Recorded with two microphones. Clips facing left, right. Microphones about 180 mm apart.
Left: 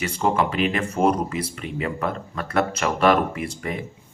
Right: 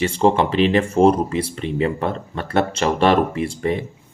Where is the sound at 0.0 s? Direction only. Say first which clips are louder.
Right 5 dB; 30° right (ahead or behind).